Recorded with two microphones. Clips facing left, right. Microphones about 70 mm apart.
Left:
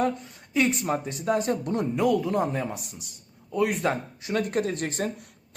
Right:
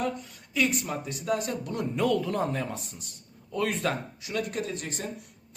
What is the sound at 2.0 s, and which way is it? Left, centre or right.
A man's voice, centre.